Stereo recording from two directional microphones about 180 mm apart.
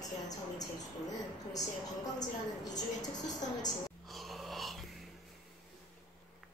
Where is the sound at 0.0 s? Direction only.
20° left (ahead or behind).